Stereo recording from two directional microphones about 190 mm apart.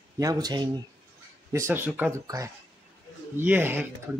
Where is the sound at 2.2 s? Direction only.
20° right (ahead or behind).